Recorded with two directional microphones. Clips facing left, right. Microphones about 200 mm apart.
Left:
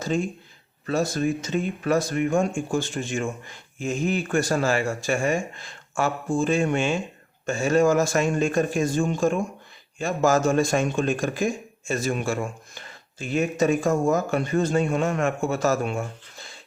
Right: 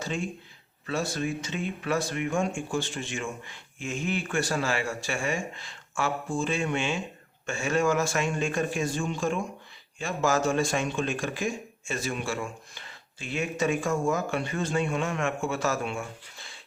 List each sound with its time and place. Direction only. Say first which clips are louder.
0.0 s a man's voice: left 6 dB; 40° left (ahead or behind)